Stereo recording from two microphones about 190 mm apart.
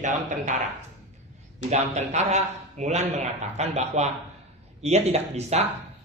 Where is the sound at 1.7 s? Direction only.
35° right (ahead or behind).